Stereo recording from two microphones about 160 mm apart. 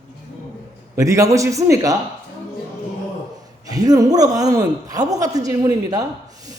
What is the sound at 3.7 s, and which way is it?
Speech, 25° right (ahead or behind).